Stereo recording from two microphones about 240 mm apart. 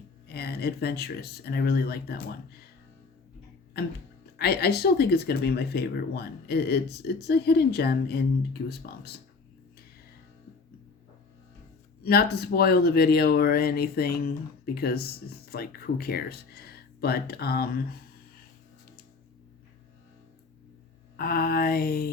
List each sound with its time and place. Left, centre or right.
0.3 s speech: left
3.8 s speech: left
12.0 s speech: left
21.2 s speech: left